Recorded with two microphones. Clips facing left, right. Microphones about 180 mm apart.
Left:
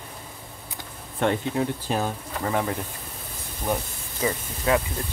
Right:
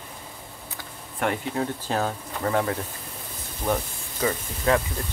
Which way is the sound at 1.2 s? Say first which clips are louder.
Left 2 dB; 25° left (ahead or behind).